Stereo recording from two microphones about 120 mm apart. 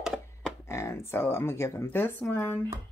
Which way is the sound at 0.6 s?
25° left (ahead or behind).